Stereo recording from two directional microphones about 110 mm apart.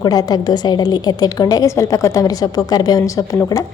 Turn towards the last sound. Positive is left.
turn(degrees=30)  # may be behind; listen again after turning